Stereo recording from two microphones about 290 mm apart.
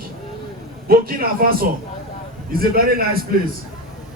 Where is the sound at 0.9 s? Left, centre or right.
Right.